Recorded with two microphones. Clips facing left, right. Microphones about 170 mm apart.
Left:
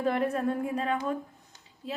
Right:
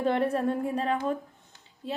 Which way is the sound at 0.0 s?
30° right (ahead or behind).